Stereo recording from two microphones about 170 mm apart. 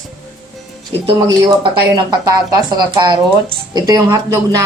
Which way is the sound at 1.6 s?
25° right (ahead or behind).